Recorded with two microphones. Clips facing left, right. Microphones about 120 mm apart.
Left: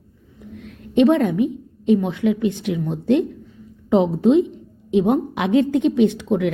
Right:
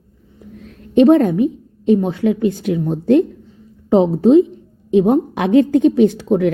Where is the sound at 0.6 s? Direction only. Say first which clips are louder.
Right 4 dB; 40° right (ahead or behind).